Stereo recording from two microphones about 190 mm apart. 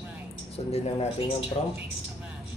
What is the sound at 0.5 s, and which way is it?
Speech, 35° left (ahead or behind).